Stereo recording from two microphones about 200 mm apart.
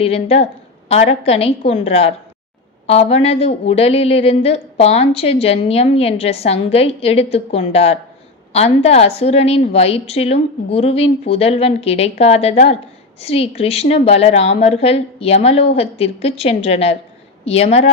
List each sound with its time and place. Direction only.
0.0 s a woman's voice: 30° left (ahead or behind)